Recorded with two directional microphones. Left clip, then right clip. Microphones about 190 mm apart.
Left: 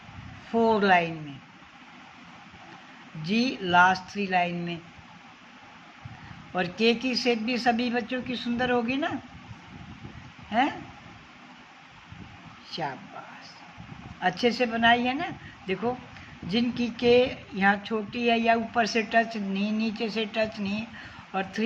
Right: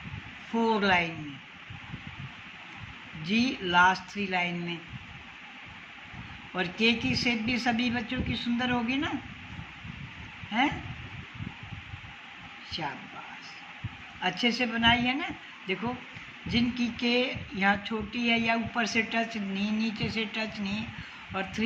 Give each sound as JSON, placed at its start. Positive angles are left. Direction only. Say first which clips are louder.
{"t": 0.6, "sound": "speech", "louder": "left 4 dB", "side_deg": 65}
{"t": 3.2, "sound": "speech", "louder": "left 1 dB", "side_deg": 65}
{"t": 6.6, "sound": "speech", "louder": "left 2 dB", "side_deg": 65}
{"t": 10.5, "sound": "speech", "louder": "left 2 dB", "side_deg": 60}
{"t": 14.2, "sound": "speech", "louder": "left 3 dB", "side_deg": 65}